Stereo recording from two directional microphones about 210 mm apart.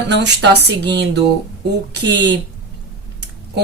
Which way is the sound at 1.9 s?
55° right (ahead or behind).